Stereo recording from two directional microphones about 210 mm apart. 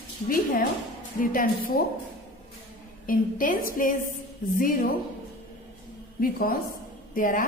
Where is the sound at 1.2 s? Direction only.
40° left (ahead or behind).